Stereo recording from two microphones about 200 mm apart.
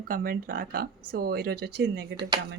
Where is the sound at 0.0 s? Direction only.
45° right (ahead or behind).